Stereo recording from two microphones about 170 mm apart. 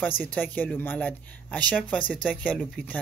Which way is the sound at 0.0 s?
10° left (ahead or behind).